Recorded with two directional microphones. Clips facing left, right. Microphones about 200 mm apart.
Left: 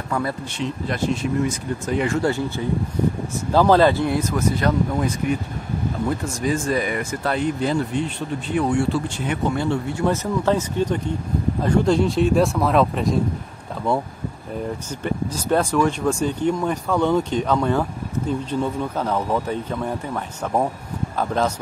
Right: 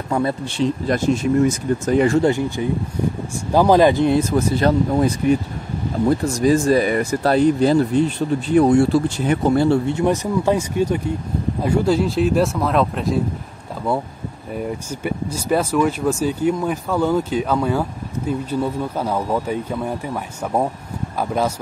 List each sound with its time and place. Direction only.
0.1 s speech: 25° right (ahead or behind)
0.8 s speech: 45° right (ahead or behind)
2.2 s speech: 15° right (ahead or behind); by 9.9 s 35° right (ahead or behind)
9.9 s speech: 15° right (ahead or behind)
14.9 s speech: 10° right (ahead or behind)